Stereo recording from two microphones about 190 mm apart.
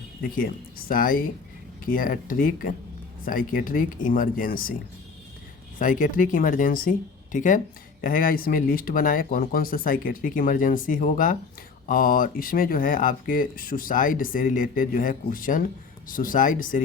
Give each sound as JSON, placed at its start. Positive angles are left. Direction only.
{"t": 0.2, "sound": "speech", "side_deg": 50}
{"t": 5.8, "sound": "speech", "side_deg": 45}